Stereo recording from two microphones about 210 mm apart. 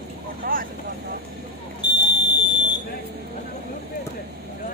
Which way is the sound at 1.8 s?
20° left (ahead or behind).